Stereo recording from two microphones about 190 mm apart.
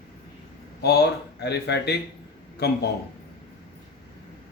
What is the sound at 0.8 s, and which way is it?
Speech, 60° left (ahead or behind).